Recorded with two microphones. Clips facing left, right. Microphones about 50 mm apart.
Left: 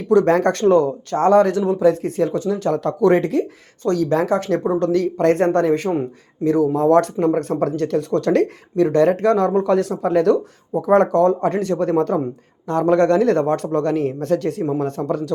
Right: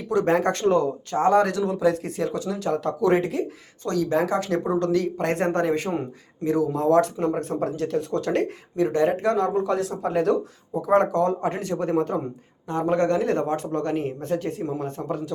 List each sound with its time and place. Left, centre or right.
0.1 s speech: left
7.6 s speech: left
10.8 s speech: left